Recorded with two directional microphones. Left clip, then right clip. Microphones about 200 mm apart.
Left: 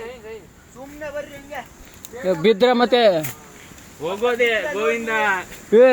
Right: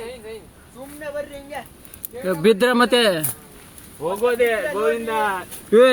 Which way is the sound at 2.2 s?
25° right (ahead or behind).